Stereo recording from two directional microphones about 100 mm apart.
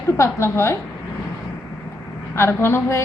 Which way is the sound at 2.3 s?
25° left (ahead or behind).